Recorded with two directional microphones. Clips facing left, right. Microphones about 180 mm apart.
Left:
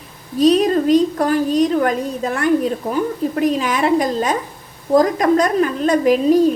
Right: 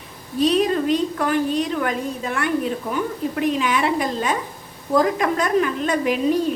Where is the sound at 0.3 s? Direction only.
40° left (ahead or behind).